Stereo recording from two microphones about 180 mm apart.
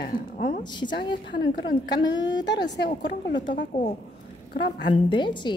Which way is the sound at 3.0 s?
75° left (ahead or behind).